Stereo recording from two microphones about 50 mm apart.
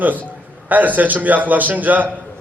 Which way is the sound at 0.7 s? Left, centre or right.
Right.